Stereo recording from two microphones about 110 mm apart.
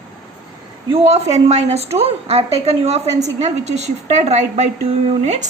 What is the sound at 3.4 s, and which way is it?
A woman's voice, 90° right.